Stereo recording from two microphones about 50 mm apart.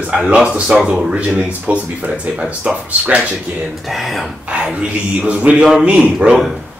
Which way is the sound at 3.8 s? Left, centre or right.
Centre.